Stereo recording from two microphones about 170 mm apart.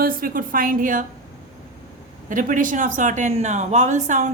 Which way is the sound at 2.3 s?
50° right (ahead or behind).